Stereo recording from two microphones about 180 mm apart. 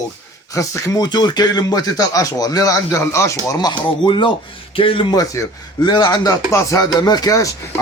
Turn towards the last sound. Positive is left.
turn(degrees=20)  # may be behind; listen again after turning